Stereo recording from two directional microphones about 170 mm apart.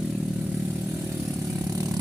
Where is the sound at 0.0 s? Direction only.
5° right (ahead or behind).